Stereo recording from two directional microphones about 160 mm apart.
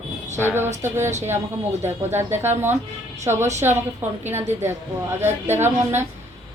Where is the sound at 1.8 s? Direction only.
15° right (ahead or behind).